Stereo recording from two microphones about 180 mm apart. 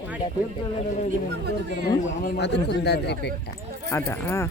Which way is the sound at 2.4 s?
70° left (ahead or behind).